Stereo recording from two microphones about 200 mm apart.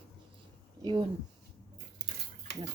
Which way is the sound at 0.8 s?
20° right (ahead or behind).